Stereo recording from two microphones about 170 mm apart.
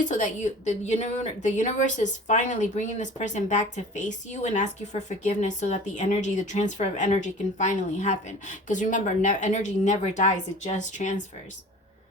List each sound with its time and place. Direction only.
0.0 s speech: 45° left (ahead or behind)